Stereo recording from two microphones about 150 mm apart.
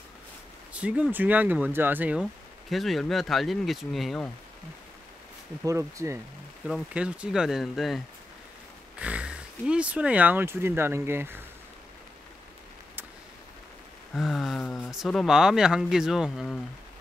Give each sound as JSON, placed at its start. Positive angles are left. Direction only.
{"t": 0.7, "sound": "speech", "side_deg": -10}
{"t": 2.7, "sound": "speech", "side_deg": 0}
{"t": 5.6, "sound": "speech", "side_deg": -20}
{"t": 6.7, "sound": "speech", "side_deg": -10}
{"t": 14.1, "sound": "speech", "side_deg": 0}